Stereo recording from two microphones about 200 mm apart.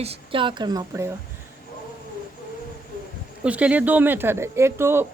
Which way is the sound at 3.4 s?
5° right (ahead or behind).